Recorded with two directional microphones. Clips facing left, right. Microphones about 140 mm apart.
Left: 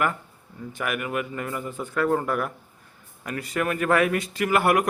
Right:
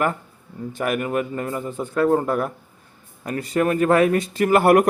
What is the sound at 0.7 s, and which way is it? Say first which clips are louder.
Speech: right 5 dB; 35° right (ahead or behind).